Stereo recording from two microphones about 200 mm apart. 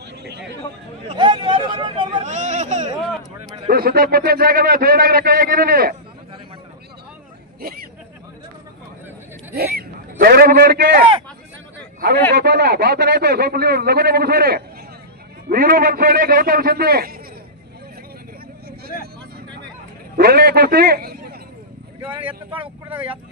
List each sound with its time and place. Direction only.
0.2 s chatter: 55° right (ahead or behind)
1.1 s a sound: 25° right (ahead or behind)
2.2 s a sound: 35° right (ahead or behind)
3.6 s a man's voice: 50° right (ahead or behind)
9.6 s a man's voice: 50° right (ahead or behind)
20.2 s a man's voice: 50° right (ahead or behind)
22.2 s speech: 25° right (ahead or behind)